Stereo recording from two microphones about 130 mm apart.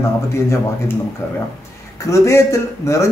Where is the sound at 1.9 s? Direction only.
25° left (ahead or behind).